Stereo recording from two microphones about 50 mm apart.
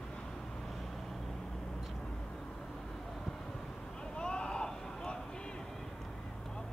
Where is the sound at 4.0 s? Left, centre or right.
Centre.